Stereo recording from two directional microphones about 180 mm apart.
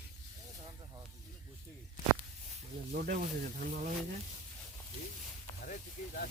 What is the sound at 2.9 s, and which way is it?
Speech, 50° right (ahead or behind).